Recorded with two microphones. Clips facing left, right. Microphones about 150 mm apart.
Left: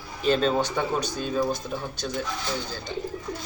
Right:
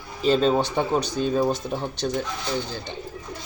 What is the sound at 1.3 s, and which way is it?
Speech, 30° right (ahead or behind).